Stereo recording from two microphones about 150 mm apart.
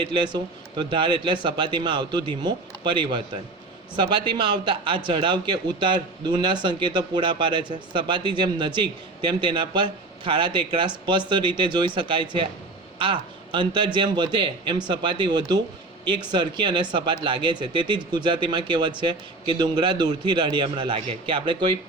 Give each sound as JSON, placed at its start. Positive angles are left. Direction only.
{"t": 0.1, "sound": "speech", "side_deg": -30}